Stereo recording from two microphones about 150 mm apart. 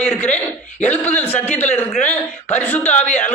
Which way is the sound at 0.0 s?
10° left (ahead or behind).